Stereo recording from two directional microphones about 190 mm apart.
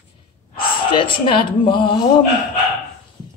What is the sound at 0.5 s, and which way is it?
Speech, 25° left (ahead or behind).